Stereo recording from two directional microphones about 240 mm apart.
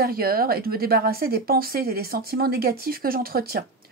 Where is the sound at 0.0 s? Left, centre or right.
Right.